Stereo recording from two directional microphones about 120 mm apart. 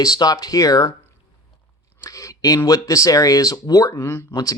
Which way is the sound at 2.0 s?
30° left (ahead or behind).